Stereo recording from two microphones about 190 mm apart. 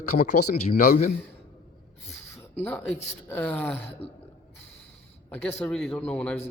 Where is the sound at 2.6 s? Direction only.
10° left (ahead or behind).